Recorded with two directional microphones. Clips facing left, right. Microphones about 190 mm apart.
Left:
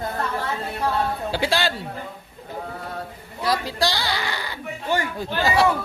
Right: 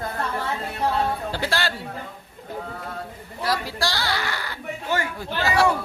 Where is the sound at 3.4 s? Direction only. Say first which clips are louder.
Left 3 dB; 15° left (ahead or behind).